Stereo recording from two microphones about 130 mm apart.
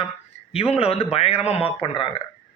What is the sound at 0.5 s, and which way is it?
Speech, 50° left (ahead or behind).